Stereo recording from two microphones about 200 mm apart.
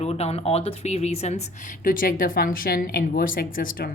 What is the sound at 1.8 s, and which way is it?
Speech, 45° left (ahead or behind).